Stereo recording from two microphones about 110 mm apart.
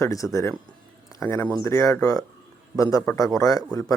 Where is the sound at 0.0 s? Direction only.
30° left (ahead or behind).